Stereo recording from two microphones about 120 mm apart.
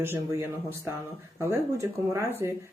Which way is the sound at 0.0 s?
20° right (ahead or behind).